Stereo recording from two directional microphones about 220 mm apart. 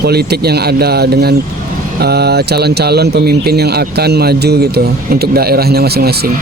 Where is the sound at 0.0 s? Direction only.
45° right (ahead or behind).